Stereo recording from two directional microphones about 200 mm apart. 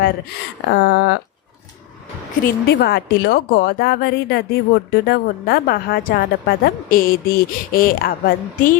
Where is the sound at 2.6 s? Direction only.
55° left (ahead or behind).